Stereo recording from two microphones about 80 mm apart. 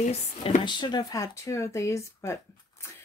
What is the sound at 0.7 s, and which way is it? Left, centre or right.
Speech, left.